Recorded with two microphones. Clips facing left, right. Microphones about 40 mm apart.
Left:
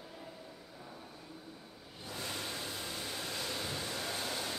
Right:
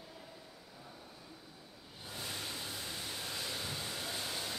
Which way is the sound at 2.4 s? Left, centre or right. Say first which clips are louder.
Left 2 dB; left.